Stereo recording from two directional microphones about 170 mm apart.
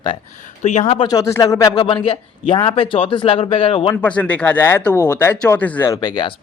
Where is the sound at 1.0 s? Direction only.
20° left (ahead or behind).